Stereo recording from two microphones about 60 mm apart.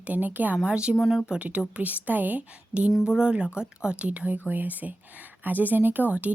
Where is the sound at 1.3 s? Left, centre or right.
Right.